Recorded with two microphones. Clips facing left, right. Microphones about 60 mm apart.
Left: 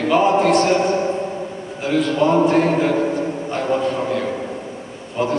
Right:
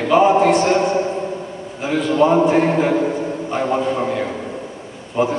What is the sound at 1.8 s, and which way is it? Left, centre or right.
A man's voice, centre.